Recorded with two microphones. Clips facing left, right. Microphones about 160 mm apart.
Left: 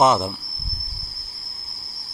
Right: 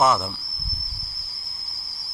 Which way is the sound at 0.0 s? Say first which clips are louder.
Left 3 dB; 20° left (ahead or behind).